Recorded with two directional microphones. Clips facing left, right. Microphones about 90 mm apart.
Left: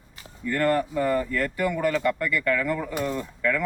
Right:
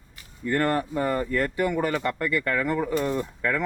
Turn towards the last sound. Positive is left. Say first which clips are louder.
# even
turn(degrees=-35)  # may be behind; listen again after turning